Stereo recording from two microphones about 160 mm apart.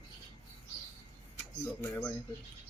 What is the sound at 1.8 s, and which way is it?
Speech, 15° left (ahead or behind).